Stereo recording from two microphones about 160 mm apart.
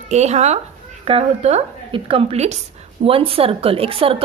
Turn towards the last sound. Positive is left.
turn(degrees=-35)  # may be behind; listen again after turning